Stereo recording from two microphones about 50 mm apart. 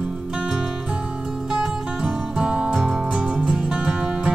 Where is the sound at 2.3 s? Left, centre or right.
Centre.